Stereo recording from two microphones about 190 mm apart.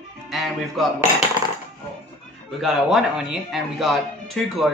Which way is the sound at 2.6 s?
Centre (ahead or behind).